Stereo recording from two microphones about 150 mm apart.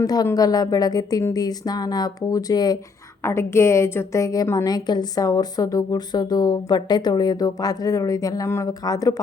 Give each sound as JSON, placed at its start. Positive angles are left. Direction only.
{"t": 0.0, "sound": "a woman's voice", "side_deg": 25}